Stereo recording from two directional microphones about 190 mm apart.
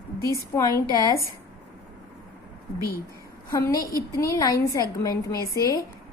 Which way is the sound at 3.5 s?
15° left (ahead or behind).